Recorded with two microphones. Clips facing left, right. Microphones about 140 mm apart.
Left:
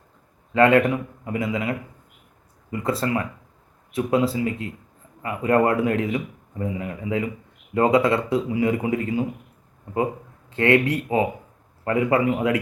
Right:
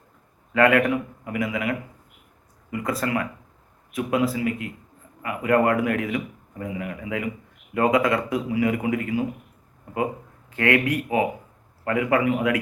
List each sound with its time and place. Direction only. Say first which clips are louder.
0.5 s a man's voice: left 2 dB; 25° left (ahead or behind)
10.5 s a man's voice: left 3 dB; 25° left (ahead or behind)